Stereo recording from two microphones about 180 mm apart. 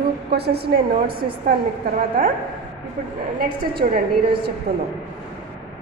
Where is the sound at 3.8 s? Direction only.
50° right (ahead or behind).